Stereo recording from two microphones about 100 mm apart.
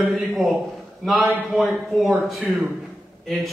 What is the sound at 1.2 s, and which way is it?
Speech, 15° left (ahead or behind).